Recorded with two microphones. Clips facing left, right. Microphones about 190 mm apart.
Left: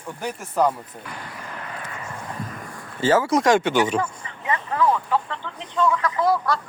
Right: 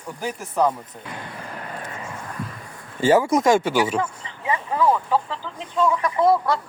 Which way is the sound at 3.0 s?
15° right (ahead or behind).